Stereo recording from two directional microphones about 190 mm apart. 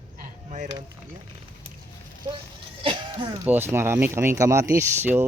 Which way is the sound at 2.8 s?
30° right (ahead or behind).